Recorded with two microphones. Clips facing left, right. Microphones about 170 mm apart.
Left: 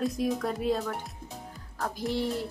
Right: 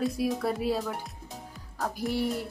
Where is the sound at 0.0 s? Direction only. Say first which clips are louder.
Right 1 dB; centre (ahead or behind).